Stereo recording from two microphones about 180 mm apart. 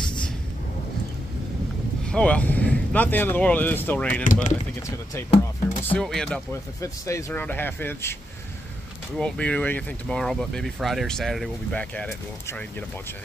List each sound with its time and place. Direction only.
2.0 s speech: 5° left (ahead or behind)
4.2 s speech: 45° left (ahead or behind)
5.9 s speech: 5° left (ahead or behind)
6.5 s speech: 15° left (ahead or behind)